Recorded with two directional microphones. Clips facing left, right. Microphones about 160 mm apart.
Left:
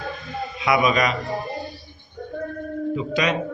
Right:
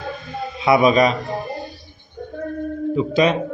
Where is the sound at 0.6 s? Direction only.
30° right (ahead or behind).